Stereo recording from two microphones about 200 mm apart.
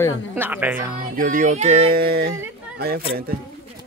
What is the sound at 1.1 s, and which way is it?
Music, 40° right (ahead or behind).